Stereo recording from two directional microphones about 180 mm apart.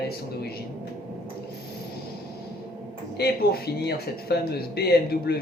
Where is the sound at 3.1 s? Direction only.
60° left (ahead or behind).